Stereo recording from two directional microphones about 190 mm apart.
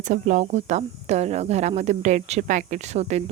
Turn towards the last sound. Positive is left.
turn(degrees=-35)  # may be behind; listen again after turning